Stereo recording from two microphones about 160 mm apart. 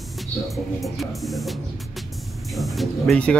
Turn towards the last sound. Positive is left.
turn(degrees=5)  # may be behind; listen again after turning